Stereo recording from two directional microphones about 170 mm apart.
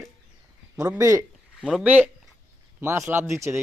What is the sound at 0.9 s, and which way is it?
Speech, 20° right (ahead or behind).